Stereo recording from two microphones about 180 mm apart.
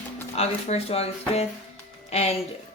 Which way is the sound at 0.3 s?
35° left (ahead or behind).